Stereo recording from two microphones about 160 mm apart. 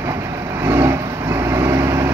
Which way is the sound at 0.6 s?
15° right (ahead or behind).